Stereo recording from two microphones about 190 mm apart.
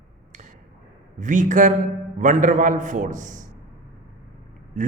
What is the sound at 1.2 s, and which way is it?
A man's voice, 40° right (ahead or behind).